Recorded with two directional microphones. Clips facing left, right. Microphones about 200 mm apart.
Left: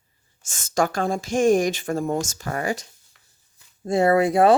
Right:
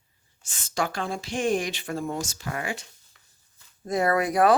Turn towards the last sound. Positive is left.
turn(degrees=25)  # may be behind; listen again after turning